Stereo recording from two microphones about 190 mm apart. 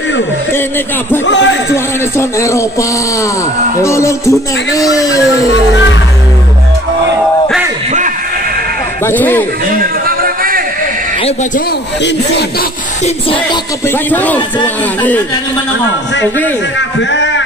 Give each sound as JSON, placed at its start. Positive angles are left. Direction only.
{"t": 1.2, "sound": "a man's voice", "side_deg": 75}
{"t": 2.1, "sound": "speech", "side_deg": 15}
{"t": 3.8, "sound": "speech", "side_deg": 15}
{"t": 9.0, "sound": "speech", "side_deg": 10}
{"t": 10.0, "sound": "a sound", "side_deg": -50}
{"t": 13.8, "sound": "speech", "side_deg": 10}
{"t": 17.1, "sound": "a sound", "side_deg": 70}